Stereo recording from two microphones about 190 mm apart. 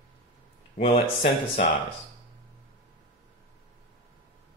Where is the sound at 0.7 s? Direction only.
30° left (ahead or behind).